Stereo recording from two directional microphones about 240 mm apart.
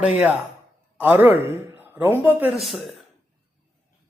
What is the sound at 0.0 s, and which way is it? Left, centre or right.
A man's voice, centre.